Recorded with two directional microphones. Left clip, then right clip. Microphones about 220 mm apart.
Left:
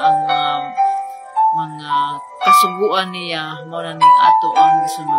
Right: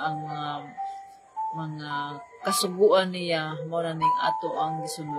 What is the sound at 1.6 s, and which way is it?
Speech, 5° left (ahead or behind).